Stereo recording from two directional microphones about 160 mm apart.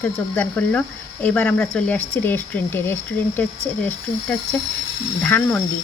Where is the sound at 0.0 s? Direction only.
10° left (ahead or behind).